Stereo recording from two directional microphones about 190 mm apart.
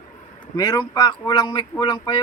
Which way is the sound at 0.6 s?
20° left (ahead or behind).